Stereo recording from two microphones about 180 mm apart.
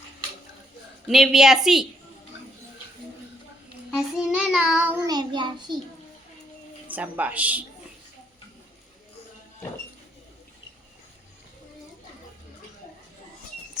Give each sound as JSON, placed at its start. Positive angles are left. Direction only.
{"t": 1.0, "sound": "child singing", "side_deg": 0}
{"t": 3.9, "sound": "child singing", "side_deg": -5}
{"t": 5.0, "sound": "child singing", "side_deg": -25}
{"t": 6.9, "sound": "a woman's voice", "side_deg": -10}